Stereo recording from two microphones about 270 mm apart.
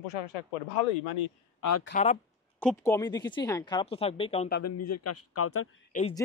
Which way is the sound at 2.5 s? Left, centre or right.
Centre.